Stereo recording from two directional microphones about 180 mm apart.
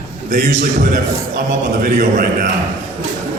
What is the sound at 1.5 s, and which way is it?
Speech, 50° right (ahead or behind).